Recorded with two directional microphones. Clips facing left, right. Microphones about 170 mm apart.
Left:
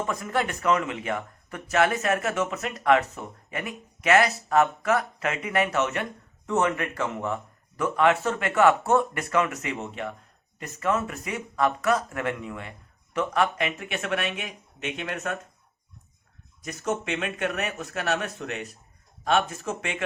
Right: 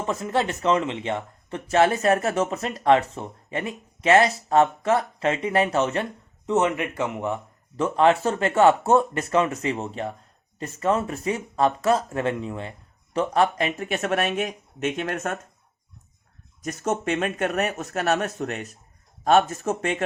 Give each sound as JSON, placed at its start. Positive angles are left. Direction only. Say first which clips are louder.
{"t": 0.0, "sound": "speech", "louder": "right 3 dB", "side_deg": -25}
{"t": 7.8, "sound": "speech", "louder": "right 3 dB", "side_deg": -30}
{"t": 16.6, "sound": "speech", "louder": "right 4 dB", "side_deg": -45}